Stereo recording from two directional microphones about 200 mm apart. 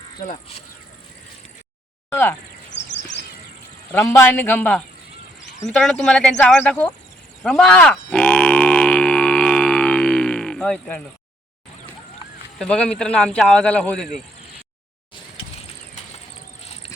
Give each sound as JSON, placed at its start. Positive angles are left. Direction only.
{"t": 2.0, "sound": "speech", "side_deg": 10}
{"t": 2.6, "sound": "a sound", "side_deg": 60}
{"t": 3.9, "sound": "a man's voice", "side_deg": 15}
{"t": 5.4, "sound": "a sound", "side_deg": 35}
{"t": 5.7, "sound": "speech", "side_deg": 5}
{"t": 7.4, "sound": "grunt", "side_deg": 0}
{"t": 12.5, "sound": "speech", "side_deg": 5}